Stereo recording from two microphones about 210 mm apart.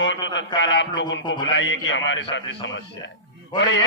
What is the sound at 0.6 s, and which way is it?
A man's voice, 60° left (ahead or behind).